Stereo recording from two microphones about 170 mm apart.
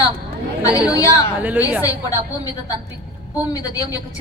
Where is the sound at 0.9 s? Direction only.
20° left (ahead or behind).